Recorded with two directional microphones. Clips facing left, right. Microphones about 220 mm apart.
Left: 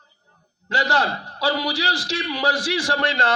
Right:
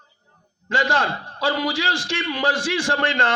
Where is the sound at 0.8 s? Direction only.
40° left (ahead or behind).